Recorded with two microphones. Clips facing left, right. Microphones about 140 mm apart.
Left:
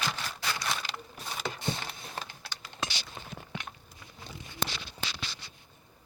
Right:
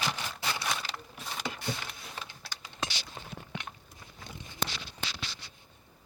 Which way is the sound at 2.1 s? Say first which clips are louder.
Left 3 dB; 45° left (ahead or behind).